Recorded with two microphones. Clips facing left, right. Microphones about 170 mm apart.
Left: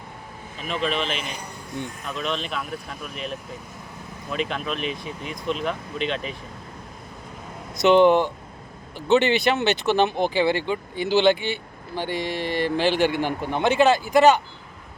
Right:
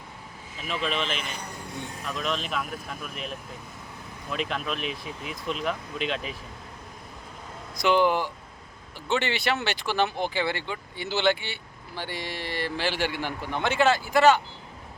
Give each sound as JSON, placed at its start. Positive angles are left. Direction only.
{"t": 0.7, "sound": "speech", "side_deg": 0}
{"t": 7.8, "sound": "speech", "side_deg": 25}